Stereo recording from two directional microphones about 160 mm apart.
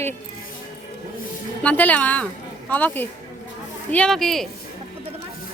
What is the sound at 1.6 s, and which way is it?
A woman's voice, 10° left (ahead or behind).